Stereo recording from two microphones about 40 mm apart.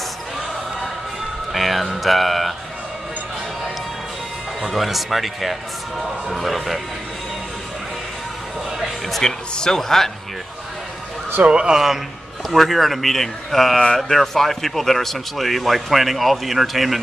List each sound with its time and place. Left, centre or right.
1.5 s a man's voice: centre
4.6 s a man's voice: centre
9.2 s speech: centre
11.4 s speech: right
12.4 s a man's voice: centre